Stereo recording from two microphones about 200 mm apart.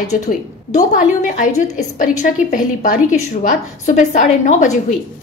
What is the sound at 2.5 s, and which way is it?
A woman's voice, 40° left (ahead or behind).